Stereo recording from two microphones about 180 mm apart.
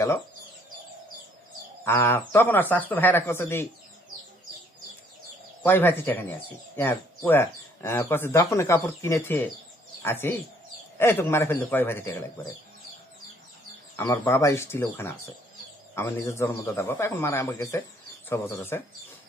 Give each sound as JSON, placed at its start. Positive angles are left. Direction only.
{"t": 1.8, "sound": "speech", "side_deg": 15}
{"t": 5.6, "sound": "speech", "side_deg": 10}
{"t": 13.9, "sound": "speech", "side_deg": 15}